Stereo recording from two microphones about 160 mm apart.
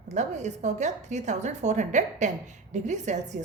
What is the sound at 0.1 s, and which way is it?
Speech, 45° right (ahead or behind).